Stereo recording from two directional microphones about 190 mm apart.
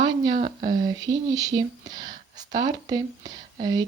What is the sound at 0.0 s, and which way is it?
Speech, 25° right (ahead or behind).